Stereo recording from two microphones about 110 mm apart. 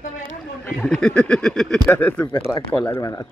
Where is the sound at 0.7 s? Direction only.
5° left (ahead or behind).